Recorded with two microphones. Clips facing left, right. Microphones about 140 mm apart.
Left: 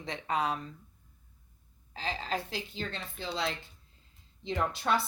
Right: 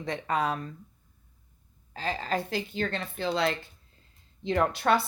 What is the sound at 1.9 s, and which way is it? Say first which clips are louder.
A woman's voice: right 4 dB; 50° right (ahead or behind).